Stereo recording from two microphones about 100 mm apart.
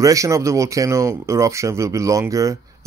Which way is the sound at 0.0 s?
30° right (ahead or behind).